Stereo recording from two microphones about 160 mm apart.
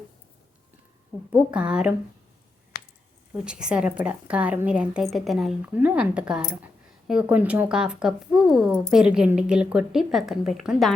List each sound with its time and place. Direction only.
1.3 s a woman's voice: 5° right (ahead or behind)
2.7 s a sound: 75° left (ahead or behind)
3.3 s a woman's voice: 5° right (ahead or behind)